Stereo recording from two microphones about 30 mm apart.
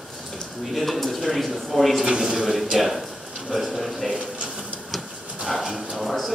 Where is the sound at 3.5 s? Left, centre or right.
Centre.